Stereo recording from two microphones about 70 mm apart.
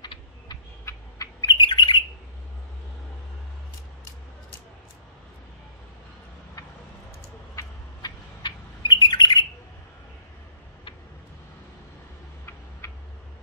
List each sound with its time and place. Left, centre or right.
0.8 s a sound: left
1.4 s bird: left
8.0 s bird: left
12.8 s tick: left